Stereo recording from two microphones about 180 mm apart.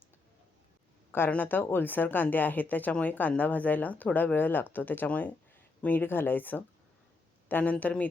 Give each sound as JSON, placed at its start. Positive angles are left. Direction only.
{"t": 1.1, "sound": "speech", "side_deg": 10}